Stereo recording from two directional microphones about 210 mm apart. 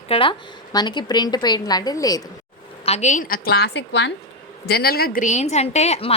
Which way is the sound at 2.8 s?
30° left (ahead or behind).